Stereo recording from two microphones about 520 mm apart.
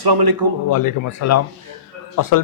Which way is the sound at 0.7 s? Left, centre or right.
Left.